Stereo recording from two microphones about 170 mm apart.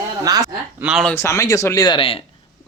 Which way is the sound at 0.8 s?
5° right (ahead or behind).